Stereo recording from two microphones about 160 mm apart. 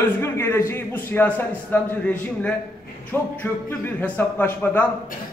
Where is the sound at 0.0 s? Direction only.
15° left (ahead or behind).